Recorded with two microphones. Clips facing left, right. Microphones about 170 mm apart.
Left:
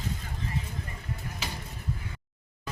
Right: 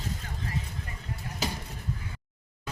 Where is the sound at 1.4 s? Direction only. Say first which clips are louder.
Right 8 dB; 40° right (ahead or behind).